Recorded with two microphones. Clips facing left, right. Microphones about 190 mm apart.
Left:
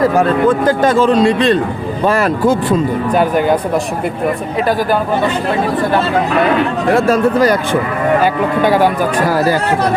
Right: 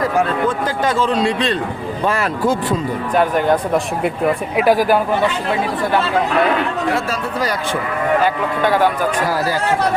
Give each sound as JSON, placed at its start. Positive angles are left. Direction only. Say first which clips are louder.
{"t": 0.2, "sound": "a man's voice", "louder": "left 6 dB", "side_deg": 50}
{"t": 3.2, "sound": "speech", "louder": "left 1 dB", "side_deg": 5}
{"t": 4.5, "sound": "speech", "louder": "right 2 dB", "side_deg": -10}
{"t": 6.9, "sound": "a man's voice", "louder": "left 10 dB", "side_deg": 50}
{"t": 8.2, "sound": "speech", "louder": "left 4 dB", "side_deg": 10}
{"t": 9.3, "sound": "speech", "louder": "left 6 dB", "side_deg": 55}